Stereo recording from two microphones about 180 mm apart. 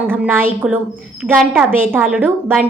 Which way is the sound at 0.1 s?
10° right (ahead or behind).